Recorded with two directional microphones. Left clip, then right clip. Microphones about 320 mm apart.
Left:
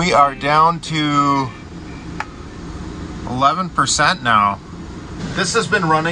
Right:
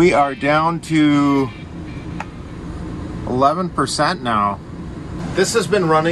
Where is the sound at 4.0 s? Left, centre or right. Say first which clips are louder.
Left 4 dB; centre.